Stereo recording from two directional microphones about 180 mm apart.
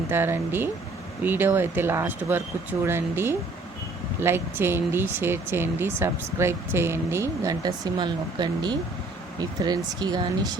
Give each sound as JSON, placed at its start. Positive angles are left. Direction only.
{"t": 0.1, "sound": "speech", "side_deg": -10}